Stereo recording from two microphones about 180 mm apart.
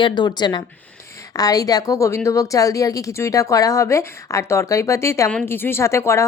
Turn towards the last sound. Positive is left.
turn(degrees=15)  # may be behind; listen again after turning